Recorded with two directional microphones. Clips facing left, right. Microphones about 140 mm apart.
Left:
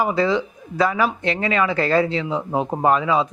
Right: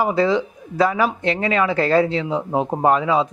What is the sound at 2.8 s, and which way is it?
Speech, 35° right (ahead or behind).